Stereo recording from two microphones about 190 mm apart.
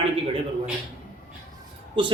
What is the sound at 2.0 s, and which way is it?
Speech, 25° right (ahead or behind).